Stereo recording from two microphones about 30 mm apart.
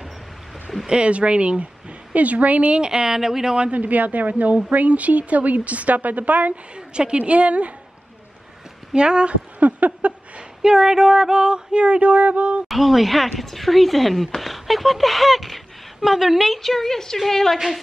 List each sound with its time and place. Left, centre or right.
0.8 s speech: right
1.1 s a woman's voice: right
2.1 s a woman's voice: right
2.7 s a sound: right
3.7 s a woman's voice: right
6.7 s a woman's voice: right
8.9 s speech: right
9.6 s a sound: right
10.6 s a sound: centre; by 12.6 s right
12.6 s speech: centre
16.5 s a woman's voice: centre